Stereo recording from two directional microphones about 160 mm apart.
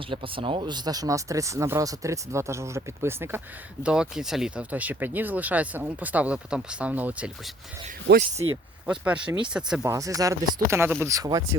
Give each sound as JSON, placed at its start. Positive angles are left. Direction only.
{"t": 0.1, "sound": "speech", "side_deg": -35}
{"t": 8.1, "sound": "speech", "side_deg": -90}
{"t": 8.9, "sound": "speech", "side_deg": -5}
{"t": 9.8, "sound": "speech", "side_deg": -20}